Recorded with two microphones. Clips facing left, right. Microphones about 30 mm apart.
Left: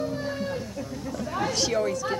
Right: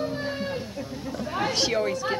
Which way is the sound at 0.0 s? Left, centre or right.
Right.